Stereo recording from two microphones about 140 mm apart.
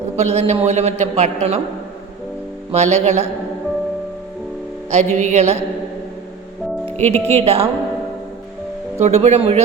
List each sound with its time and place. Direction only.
0.2 s a man's voice: 50° right (ahead or behind)
2.7 s a man's voice: 55° right (ahead or behind)
4.9 s a man's voice: 55° right (ahead or behind)
7.0 s a man's voice: 50° right (ahead or behind)
9.0 s a man's voice: 55° right (ahead or behind)